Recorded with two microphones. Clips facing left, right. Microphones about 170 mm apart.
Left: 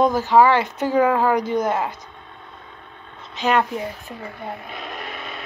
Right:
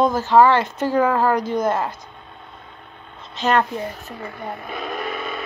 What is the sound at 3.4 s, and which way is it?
Speech, 15° left (ahead or behind).